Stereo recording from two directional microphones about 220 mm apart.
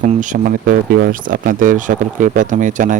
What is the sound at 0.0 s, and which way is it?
Speech, 35° right (ahead or behind).